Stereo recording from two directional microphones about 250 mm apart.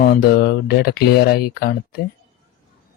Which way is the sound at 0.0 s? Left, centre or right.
Left.